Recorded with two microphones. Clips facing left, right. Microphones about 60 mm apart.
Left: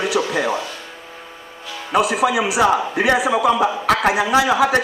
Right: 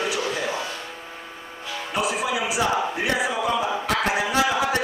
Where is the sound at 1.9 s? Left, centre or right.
Left.